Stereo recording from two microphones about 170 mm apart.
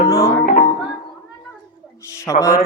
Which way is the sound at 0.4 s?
50° left (ahead or behind).